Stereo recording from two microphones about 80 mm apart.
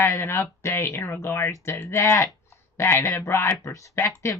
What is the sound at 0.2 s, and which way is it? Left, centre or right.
Speech, left.